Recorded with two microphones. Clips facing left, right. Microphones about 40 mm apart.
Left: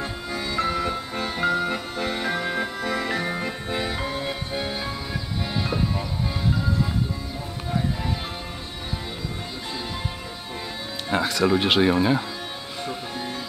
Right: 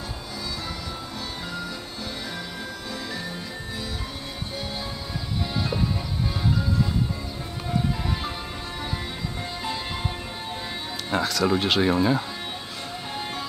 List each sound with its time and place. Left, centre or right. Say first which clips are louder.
0.3 s music: left 10 dB; left
4.6 s music: left 3 dB; left
5.6 s music: left 2 dB; centre
11.1 s speech: left 2 dB; centre